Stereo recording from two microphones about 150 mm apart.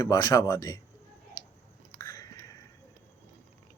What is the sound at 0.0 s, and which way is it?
Speech, 25° left (ahead or behind).